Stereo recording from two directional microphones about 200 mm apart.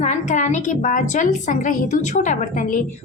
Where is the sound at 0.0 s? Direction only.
35° left (ahead or behind).